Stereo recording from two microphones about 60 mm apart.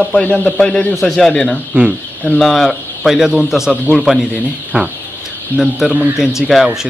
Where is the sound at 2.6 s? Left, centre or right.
Centre.